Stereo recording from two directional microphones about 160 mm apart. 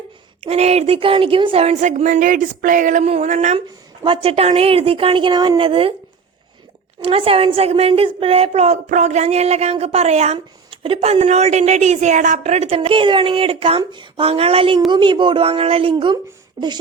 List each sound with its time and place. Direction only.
0.4 s speech: 40° right (ahead or behind)
4.0 s a woman's voice: 35° right (ahead or behind)
7.0 s a woman's voice: 35° right (ahead or behind)
10.3 s a woman's voice: 30° right (ahead or behind)
16.6 s a sound: 30° right (ahead or behind)